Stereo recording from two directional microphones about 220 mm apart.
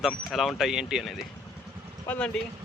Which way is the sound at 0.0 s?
Centre (ahead or behind).